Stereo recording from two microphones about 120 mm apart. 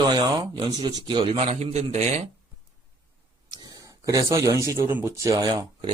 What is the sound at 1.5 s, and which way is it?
Speech, 65° right (ahead or behind).